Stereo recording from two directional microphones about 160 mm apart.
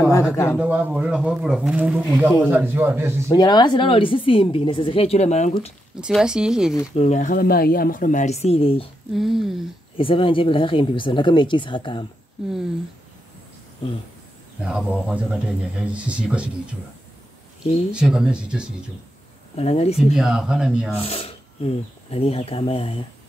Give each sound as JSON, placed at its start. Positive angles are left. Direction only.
{"t": 0.1, "sound": "a man's voice", "side_deg": 15}
{"t": 0.6, "sound": "speech", "side_deg": -10}
{"t": 3.3, "sound": "speech", "side_deg": 25}
{"t": 5.9, "sound": "speech", "side_deg": -5}
{"t": 7.0, "sound": "speech", "side_deg": 50}
{"t": 9.1, "sound": "speech", "side_deg": 0}
{"t": 9.9, "sound": "speech", "side_deg": 35}
{"t": 13.8, "sound": "speech", "side_deg": 35}
{"t": 14.6, "sound": "speech", "side_deg": -5}
{"t": 17.9, "sound": "speech", "side_deg": -5}
{"t": 19.5, "sound": "speech", "side_deg": 40}
{"t": 20.2, "sound": "speech", "side_deg": -5}
{"t": 21.0, "sound": "speech", "side_deg": 40}